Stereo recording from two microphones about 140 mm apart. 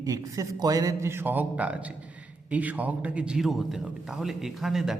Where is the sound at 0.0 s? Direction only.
25° right (ahead or behind); by 4.9 s centre (ahead or behind).